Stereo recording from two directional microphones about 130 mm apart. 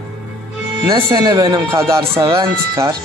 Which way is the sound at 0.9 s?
30° right (ahead or behind).